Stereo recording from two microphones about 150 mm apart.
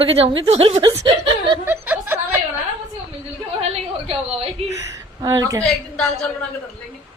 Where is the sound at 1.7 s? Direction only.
15° right (ahead or behind).